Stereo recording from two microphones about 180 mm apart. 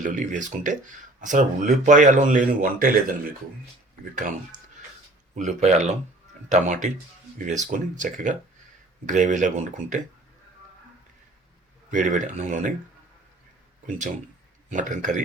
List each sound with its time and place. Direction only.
0.0 s speech: 45° right (ahead or behind)
4.1 s speech: 45° right (ahead or behind)
11.9 s speech: 45° right (ahead or behind)
14.7 s speech: 45° right (ahead or behind)